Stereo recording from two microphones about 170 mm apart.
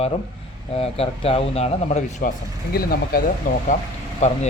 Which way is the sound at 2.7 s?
60° left (ahead or behind).